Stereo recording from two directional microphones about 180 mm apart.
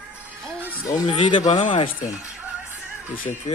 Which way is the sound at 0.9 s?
20° left (ahead or behind).